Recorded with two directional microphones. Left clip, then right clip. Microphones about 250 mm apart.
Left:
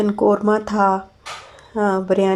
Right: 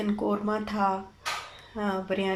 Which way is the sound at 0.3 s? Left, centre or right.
Left.